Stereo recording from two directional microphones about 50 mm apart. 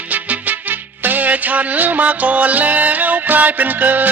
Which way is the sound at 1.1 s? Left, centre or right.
Right.